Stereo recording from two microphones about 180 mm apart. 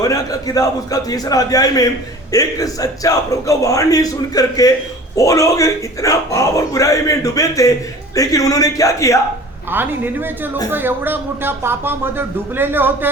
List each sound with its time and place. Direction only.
0.0 s a man's voice: 20° left (ahead or behind)
9.6 s speech: 10° right (ahead or behind)